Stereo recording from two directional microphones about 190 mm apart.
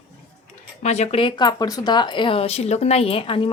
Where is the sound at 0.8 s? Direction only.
35° left (ahead or behind).